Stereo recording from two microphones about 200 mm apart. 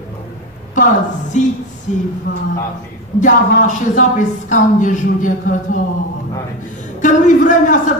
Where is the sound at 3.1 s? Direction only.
40° left (ahead or behind).